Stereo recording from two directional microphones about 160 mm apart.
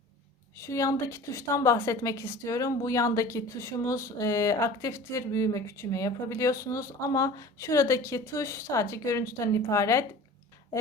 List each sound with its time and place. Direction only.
0.6 s a woman's voice: 20° left (ahead or behind)